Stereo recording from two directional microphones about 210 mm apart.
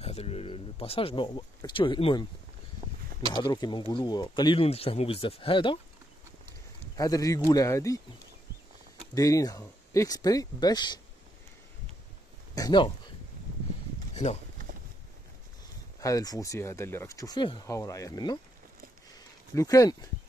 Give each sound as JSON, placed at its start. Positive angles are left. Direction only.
{"t": 0.0, "sound": "speech", "side_deg": 30}
{"t": 2.8, "sound": "a sound", "side_deg": -30}
{"t": 3.3, "sound": "speech", "side_deg": 20}
{"t": 7.0, "sound": "speech", "side_deg": 15}
{"t": 9.1, "sound": "speech", "side_deg": 15}
{"t": 12.5, "sound": "speech", "side_deg": 20}
{"t": 14.1, "sound": "speech", "side_deg": 30}
{"t": 16.0, "sound": "speech", "side_deg": 15}
{"t": 19.5, "sound": "speech", "side_deg": 15}